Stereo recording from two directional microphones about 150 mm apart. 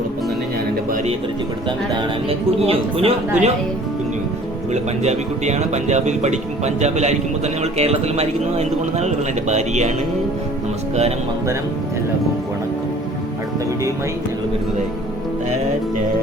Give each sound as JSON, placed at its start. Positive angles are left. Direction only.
{"t": 2.6, "sound": "speech", "side_deg": -40}
{"t": 4.7, "sound": "speech", "side_deg": -50}